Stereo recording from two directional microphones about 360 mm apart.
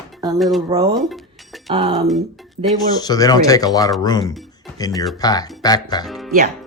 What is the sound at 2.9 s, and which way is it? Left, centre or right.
Speech, centre.